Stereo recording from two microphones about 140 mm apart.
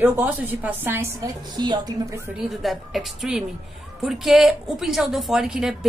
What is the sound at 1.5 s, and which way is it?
Speech, 30° right (ahead or behind).